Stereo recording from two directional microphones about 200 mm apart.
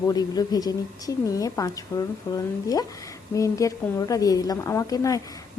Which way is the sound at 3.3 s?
15° left (ahead or behind).